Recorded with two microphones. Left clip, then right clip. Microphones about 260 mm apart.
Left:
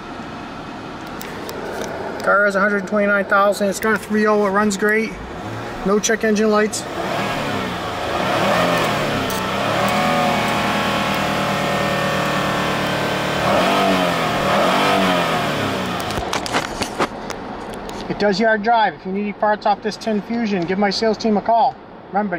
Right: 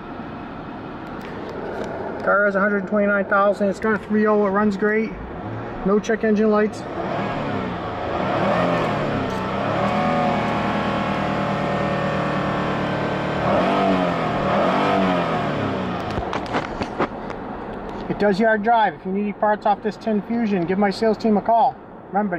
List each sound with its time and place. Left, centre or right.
2.3 s speech: centre
4.4 s speech: centre
5.9 s vehicle: centre
18.0 s speech: centre